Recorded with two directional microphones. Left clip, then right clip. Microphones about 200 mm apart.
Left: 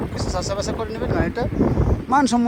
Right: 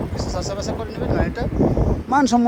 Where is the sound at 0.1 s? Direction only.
10° right (ahead or behind).